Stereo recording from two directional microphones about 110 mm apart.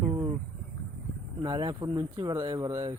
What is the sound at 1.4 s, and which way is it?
Speech, 40° right (ahead or behind).